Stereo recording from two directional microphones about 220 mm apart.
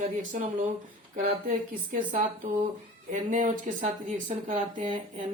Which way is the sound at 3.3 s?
35° right (ahead or behind).